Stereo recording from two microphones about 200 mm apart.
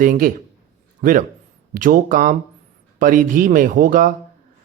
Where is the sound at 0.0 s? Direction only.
45° right (ahead or behind).